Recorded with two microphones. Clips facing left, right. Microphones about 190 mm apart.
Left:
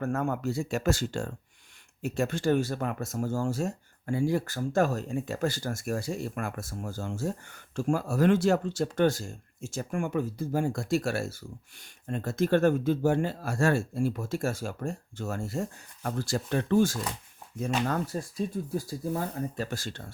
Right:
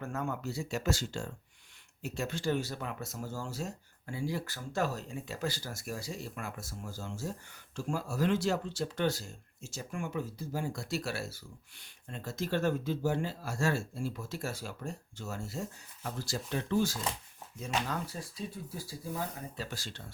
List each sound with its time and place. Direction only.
0.0 s speech: 50° left (ahead or behind)